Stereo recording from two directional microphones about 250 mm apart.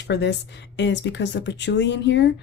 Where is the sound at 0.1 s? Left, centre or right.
Left.